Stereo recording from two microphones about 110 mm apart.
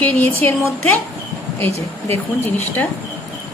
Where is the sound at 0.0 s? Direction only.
15° left (ahead or behind).